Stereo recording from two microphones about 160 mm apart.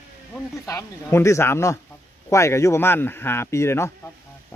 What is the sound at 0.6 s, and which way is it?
Speech, 15° left (ahead or behind).